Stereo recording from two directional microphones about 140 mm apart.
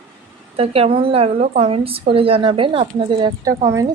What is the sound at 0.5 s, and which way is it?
A woman's voice, 45° right (ahead or behind).